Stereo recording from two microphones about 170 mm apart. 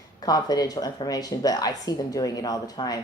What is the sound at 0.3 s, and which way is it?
Speech, 20° left (ahead or behind).